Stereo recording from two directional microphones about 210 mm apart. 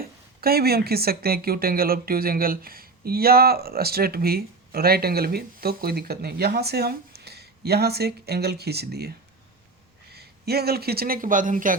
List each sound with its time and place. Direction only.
0.0 s speech: 45° right (ahead or behind)